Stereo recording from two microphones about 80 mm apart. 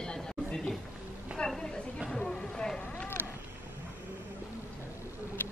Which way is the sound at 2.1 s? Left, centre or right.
Centre.